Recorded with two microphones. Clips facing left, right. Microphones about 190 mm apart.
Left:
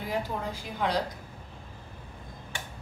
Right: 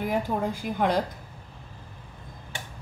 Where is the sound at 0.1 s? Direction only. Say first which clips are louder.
Right 2 dB; 55° right (ahead or behind).